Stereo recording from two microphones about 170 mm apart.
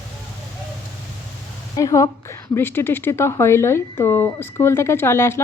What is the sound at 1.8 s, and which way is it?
A woman's voice, 20° left (ahead or behind).